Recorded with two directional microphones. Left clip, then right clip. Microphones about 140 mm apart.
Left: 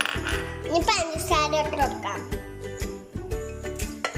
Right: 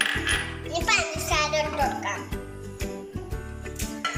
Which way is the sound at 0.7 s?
35° left (ahead or behind).